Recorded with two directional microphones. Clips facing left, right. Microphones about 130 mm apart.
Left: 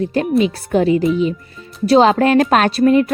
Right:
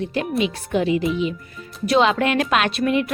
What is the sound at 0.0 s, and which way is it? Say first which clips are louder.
Speech: left 7 dB; 40° left (ahead or behind).